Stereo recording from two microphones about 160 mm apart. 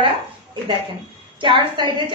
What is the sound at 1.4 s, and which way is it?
Speech, 30° right (ahead or behind).